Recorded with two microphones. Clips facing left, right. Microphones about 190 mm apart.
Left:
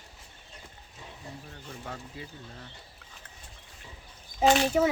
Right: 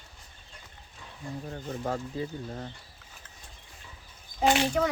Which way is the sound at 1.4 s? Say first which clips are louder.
Right 11 dB; 40° right (ahead or behind).